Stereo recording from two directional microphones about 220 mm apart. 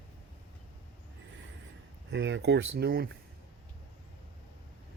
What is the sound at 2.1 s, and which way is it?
Speech, 55° right (ahead or behind).